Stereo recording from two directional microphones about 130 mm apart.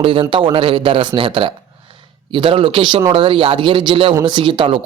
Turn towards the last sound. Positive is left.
turn(degrees=-40)  # may be behind; listen again after turning